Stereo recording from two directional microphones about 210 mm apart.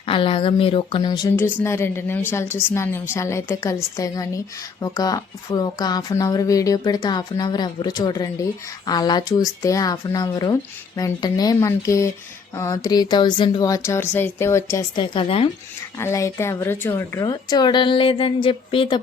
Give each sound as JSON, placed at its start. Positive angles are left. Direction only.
{"t": 0.0, "sound": "speech", "side_deg": 25}
{"t": 16.0, "sound": "speech", "side_deg": 15}